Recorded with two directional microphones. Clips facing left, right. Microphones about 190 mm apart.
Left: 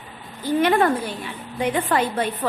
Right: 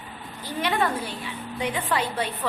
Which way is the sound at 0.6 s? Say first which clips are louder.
Left 6 dB; 50° left (ahead or behind).